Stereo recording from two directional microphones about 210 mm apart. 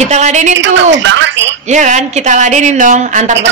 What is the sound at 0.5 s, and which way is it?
Speech, 60° right (ahead or behind).